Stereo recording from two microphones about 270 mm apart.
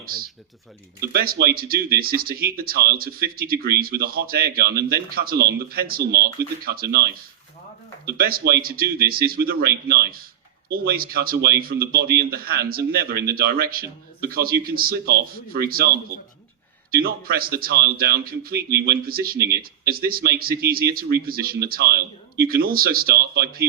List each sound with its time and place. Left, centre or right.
0.0 s speech: right
8.2 s speech: right
16.9 s speech: right